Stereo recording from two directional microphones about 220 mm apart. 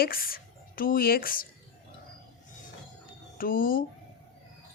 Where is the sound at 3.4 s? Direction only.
40° left (ahead or behind).